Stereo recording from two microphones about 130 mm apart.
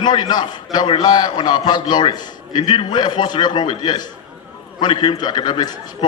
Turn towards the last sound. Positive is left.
turn(degrees=35)  # may be behind; listen again after turning